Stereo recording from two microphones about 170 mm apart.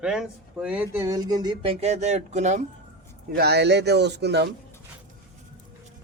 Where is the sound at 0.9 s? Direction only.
20° right (ahead or behind).